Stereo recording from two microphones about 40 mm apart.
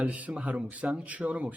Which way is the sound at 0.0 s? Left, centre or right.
Right.